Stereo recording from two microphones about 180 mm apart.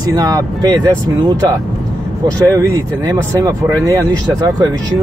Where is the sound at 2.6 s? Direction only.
15° right (ahead or behind).